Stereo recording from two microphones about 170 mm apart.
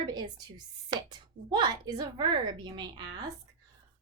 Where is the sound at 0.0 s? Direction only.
25° right (ahead or behind).